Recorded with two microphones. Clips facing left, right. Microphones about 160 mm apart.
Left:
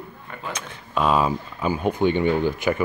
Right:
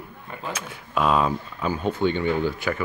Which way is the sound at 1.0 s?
5° left (ahead or behind).